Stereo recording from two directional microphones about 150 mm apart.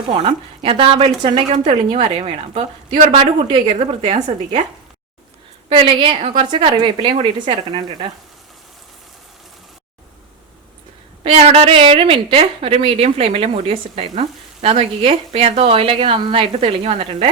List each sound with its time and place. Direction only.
0.1 s a woman's voice: 40° right (ahead or behind)
3.1 s a woman's voice: 35° right (ahead or behind)
3.8 s a woman's voice: 50° right (ahead or behind)
5.6 s a woman's voice: 35° right (ahead or behind)
11.2 s a woman's voice: 40° right (ahead or behind)